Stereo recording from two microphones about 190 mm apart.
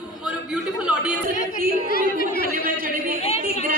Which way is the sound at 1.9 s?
50° left (ahead or behind).